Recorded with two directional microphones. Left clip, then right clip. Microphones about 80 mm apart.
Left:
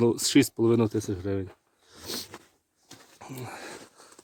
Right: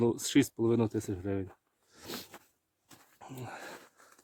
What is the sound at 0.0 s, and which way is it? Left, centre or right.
Speech, right.